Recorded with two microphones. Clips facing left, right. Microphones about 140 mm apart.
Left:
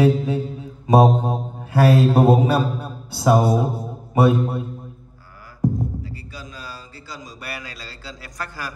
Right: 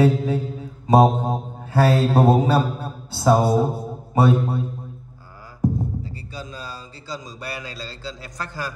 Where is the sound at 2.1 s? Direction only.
Centre (ahead or behind).